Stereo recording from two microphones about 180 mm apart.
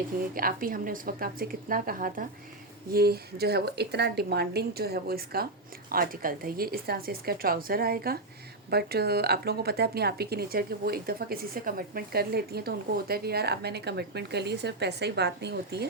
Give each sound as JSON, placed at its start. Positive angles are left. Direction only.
{"t": 0.3, "sound": "a woman's voice", "side_deg": -50}